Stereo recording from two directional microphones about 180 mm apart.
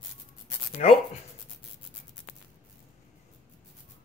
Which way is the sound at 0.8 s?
40° left (ahead or behind).